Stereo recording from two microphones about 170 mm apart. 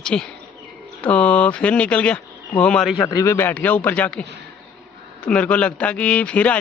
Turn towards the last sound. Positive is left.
turn(degrees=5)  # may be behind; listen again after turning